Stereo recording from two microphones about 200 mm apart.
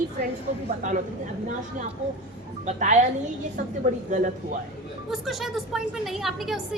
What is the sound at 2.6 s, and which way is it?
Speech, 35° right (ahead or behind).